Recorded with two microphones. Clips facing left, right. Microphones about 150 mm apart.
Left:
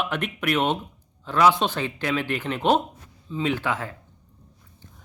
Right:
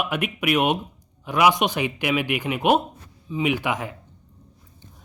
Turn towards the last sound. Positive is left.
turn(degrees=-15)  # may be behind; listen again after turning